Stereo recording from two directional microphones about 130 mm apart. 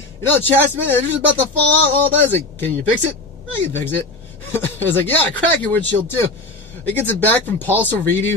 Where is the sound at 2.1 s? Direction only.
15° left (ahead or behind).